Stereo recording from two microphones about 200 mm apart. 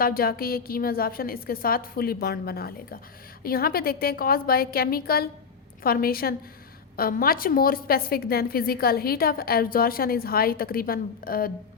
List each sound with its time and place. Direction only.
0.0 s a woman's voice: 50° left (ahead or behind)